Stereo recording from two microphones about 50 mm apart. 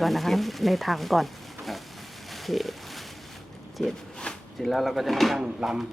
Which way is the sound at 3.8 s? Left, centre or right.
Centre.